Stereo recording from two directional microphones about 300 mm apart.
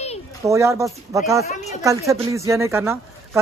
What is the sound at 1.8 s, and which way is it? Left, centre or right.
Speech, centre.